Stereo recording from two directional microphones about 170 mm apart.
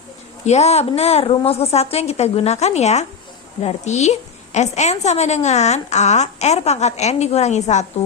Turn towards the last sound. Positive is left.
turn(degrees=40)  # may be behind; listen again after turning